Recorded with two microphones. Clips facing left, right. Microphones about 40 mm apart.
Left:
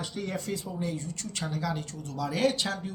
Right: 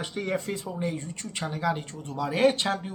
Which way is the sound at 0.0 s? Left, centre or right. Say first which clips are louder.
Right 4 dB; right.